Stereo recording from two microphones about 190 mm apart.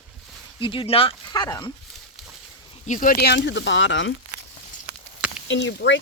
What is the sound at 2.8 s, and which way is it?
Speech, 45° left (ahead or behind).